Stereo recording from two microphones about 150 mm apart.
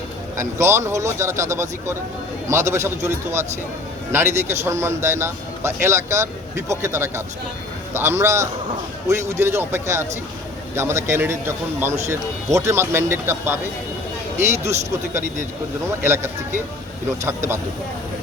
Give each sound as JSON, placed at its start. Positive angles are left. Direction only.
{"t": 0.3, "sound": "a man's voice", "side_deg": -20}